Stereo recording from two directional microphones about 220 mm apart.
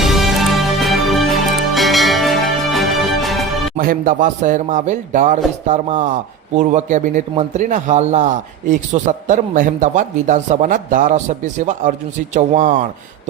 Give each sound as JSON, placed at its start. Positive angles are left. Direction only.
{"t": 0.0, "sound": "music", "side_deg": 0}
{"t": 3.8, "sound": "speech", "side_deg": -40}